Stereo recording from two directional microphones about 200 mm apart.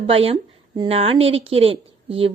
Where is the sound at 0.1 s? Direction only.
30° right (ahead or behind).